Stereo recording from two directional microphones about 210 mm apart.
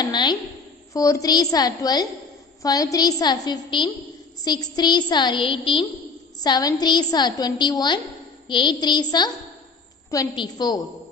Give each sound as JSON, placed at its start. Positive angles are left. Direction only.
{"t": 0.0, "sound": "a woman's voice", "side_deg": 20}